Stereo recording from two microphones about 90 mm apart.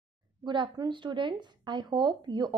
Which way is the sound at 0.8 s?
60° right (ahead or behind).